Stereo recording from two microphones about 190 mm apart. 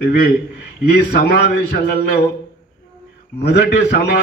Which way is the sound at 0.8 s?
55° left (ahead or behind).